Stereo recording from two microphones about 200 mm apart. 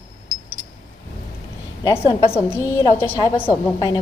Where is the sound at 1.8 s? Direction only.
15° left (ahead or behind).